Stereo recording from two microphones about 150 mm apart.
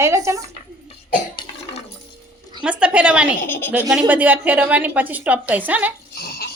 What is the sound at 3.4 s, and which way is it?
Speech, 15° left (ahead or behind).